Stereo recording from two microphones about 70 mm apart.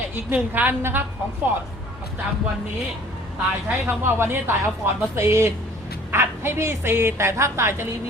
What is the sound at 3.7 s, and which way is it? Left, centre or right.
A woman's voice, right.